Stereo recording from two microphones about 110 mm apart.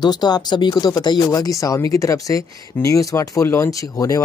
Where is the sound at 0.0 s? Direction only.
40° left (ahead or behind).